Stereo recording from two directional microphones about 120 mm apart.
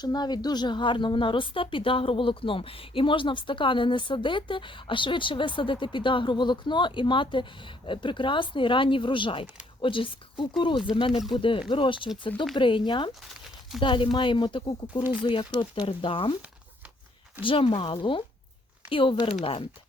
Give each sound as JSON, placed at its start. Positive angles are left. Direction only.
{"t": 0.0, "sound": "a woman's voice", "side_deg": 35}
{"t": 17.4, "sound": "a woman's voice", "side_deg": 45}